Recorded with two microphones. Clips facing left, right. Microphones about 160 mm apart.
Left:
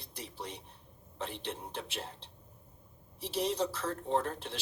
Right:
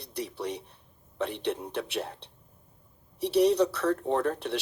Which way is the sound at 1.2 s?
65° right (ahead or behind).